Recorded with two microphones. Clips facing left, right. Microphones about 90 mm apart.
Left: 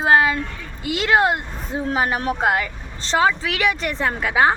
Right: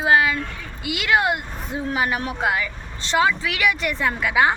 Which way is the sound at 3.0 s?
35° left (ahead or behind).